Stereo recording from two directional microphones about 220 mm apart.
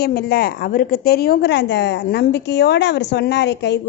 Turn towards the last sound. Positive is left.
turn(degrees=50)  # may be behind; listen again after turning